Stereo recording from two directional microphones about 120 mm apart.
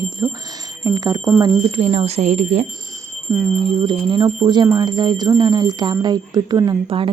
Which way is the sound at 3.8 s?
45° right (ahead or behind).